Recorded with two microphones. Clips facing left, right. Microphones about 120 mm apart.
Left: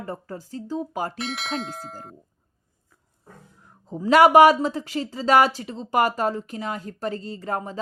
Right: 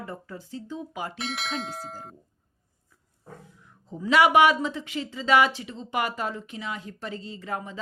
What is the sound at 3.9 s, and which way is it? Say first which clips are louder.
Speech: left 5 dB; 40° left (ahead or behind).